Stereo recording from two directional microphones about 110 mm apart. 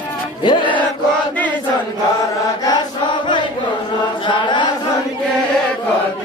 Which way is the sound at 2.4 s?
30° left (ahead or behind).